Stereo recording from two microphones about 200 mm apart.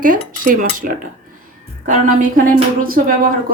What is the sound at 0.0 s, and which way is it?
Cutlery, 45° right (ahead or behind).